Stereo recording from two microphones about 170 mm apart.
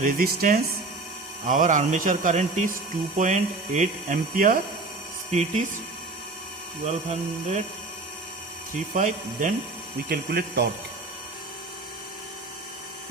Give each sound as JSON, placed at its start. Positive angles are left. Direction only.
{"t": 0.0, "sound": "speech", "side_deg": -60}
{"t": 1.5, "sound": "speech", "side_deg": -50}
{"t": 5.3, "sound": "speech", "side_deg": -40}
{"t": 6.8, "sound": "speech", "side_deg": -40}
{"t": 8.9, "sound": "speech", "side_deg": -50}
{"t": 10.1, "sound": "speech", "side_deg": -75}